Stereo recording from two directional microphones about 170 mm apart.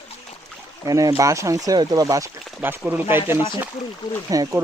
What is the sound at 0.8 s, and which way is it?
Speech, 20° right (ahead or behind).